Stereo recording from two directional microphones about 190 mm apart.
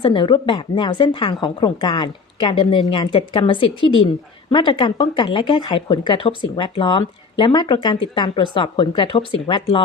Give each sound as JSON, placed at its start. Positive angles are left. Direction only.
{"t": 0.0, "sound": "speech", "side_deg": 25}